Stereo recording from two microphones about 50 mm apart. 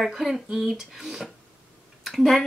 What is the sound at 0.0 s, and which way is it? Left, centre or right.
Speech, centre.